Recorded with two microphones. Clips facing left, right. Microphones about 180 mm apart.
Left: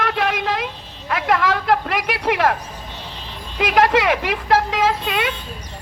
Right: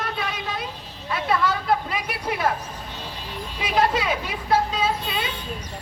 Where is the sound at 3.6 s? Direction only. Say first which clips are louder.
Left 6 dB; 90° left.